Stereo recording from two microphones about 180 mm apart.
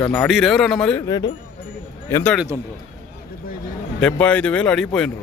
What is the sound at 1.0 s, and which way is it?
Speech, 20° left (ahead or behind).